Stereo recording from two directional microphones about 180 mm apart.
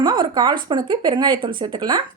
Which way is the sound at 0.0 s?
25° right (ahead or behind).